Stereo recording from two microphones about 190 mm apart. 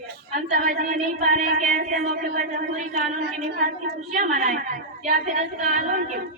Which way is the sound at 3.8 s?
40° right (ahead or behind).